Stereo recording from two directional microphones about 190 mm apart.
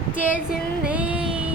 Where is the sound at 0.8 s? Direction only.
5° right (ahead or behind).